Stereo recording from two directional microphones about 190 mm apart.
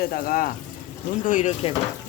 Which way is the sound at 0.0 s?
50° left (ahead or behind).